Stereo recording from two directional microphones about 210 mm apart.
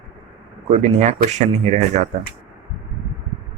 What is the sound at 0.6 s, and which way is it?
Speech, 30° right (ahead or behind).